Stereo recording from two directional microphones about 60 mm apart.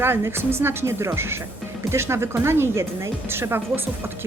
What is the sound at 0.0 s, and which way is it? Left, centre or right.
Speech, right.